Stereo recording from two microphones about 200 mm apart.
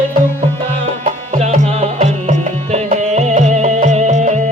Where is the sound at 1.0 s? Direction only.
35° right (ahead or behind).